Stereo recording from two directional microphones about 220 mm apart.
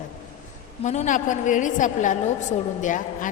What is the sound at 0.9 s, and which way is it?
A woman's voice, 35° left (ahead or behind).